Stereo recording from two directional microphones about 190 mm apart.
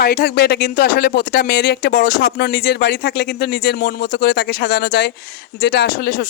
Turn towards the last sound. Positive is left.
turn(degrees=55)  # may be behind; listen again after turning